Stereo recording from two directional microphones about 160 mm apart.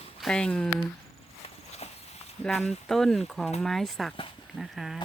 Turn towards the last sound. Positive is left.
turn(degrees=0)  # may be behind; listen again after turning